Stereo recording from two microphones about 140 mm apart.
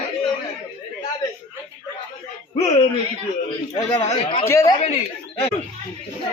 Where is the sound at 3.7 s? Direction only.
30° left (ahead or behind).